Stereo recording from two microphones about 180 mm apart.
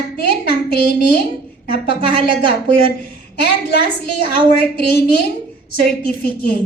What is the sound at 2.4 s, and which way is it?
A woman's voice, 60° left (ahead or behind).